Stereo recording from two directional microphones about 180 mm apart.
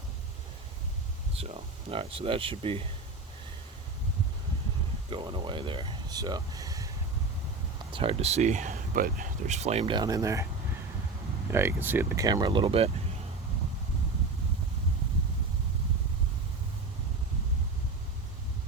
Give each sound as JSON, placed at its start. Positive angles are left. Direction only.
{"t": 1.4, "sound": "speech", "side_deg": -35}
{"t": 5.1, "sound": "speech", "side_deg": -25}
{"t": 7.9, "sound": "speech", "side_deg": -30}
{"t": 11.5, "sound": "speech", "side_deg": -10}